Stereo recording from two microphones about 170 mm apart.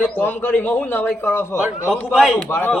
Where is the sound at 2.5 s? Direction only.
10° left (ahead or behind).